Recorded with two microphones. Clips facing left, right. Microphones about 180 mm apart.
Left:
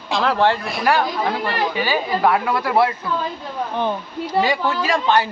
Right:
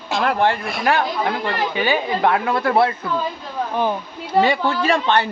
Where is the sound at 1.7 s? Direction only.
20° right (ahead or behind).